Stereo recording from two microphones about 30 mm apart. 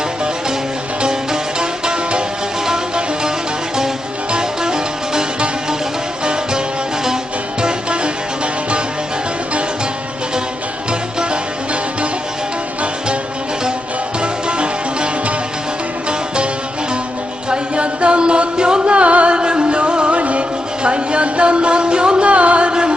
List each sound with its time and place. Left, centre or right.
1.0 s music: right
7.6 s music: right
14.2 s music: right
17.5 s music: right
20.8 s a sound: right
22.3 s music: right